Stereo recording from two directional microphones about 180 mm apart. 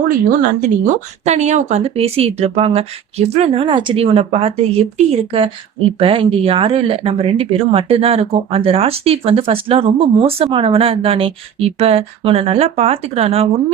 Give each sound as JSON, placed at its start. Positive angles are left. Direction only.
{"t": 0.1, "sound": "speech", "side_deg": -45}